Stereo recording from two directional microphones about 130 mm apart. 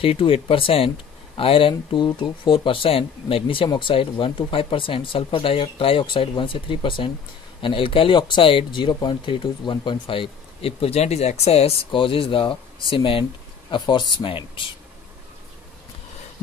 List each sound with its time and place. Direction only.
0.0 s speech: 45° left (ahead or behind)